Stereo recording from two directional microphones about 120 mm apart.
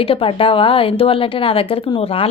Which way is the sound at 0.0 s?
50° left (ahead or behind).